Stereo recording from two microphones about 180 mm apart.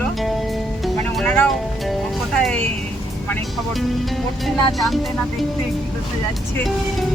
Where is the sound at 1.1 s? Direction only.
10° left (ahead or behind).